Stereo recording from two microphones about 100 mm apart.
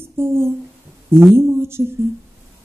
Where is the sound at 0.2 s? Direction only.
25° right (ahead or behind).